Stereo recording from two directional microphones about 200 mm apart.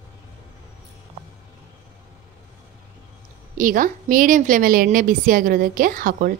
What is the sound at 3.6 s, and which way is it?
Speech, 40° right (ahead or behind).